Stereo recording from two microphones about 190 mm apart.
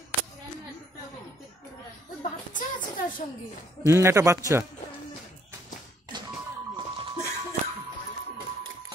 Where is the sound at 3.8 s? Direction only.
15° right (ahead or behind).